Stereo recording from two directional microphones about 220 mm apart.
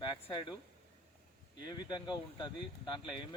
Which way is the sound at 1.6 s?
20° left (ahead or behind).